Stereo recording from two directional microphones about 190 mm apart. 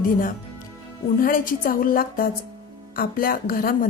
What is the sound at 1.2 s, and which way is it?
A woman's voice, 45° left (ahead or behind).